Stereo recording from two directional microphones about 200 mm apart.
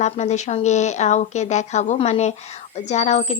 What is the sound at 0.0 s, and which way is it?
A woman's voice, 35° left (ahead or behind).